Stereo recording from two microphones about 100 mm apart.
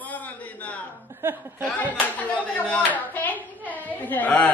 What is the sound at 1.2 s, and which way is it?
Speech, 20° right (ahead or behind).